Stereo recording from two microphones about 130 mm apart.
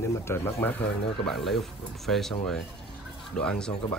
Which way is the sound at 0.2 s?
20° left (ahead or behind).